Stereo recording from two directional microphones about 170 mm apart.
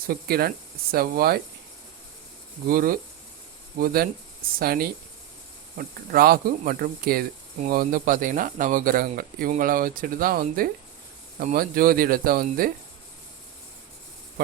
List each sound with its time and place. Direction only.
0.1 s speech: 65° right (ahead or behind)
2.6 s speech: 55° right (ahead or behind)